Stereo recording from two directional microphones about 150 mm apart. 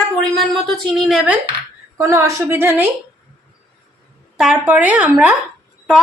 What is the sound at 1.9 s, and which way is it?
Speech, 20° right (ahead or behind).